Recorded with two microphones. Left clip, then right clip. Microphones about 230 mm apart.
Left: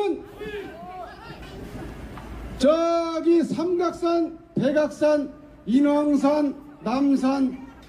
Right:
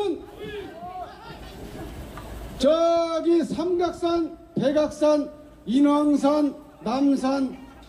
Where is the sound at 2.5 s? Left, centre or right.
Centre.